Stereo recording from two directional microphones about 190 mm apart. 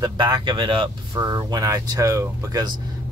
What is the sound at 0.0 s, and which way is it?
Speech, 25° right (ahead or behind).